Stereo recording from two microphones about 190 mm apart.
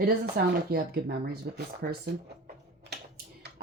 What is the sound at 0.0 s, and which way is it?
Speech, 55° right (ahead or behind).